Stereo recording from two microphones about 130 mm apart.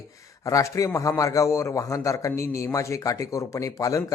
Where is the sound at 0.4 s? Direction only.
25° left (ahead or behind).